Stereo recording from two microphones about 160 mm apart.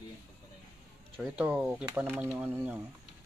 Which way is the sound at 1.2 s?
5° right (ahead or behind).